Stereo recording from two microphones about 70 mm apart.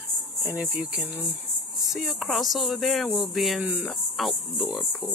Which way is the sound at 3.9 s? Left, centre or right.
Centre.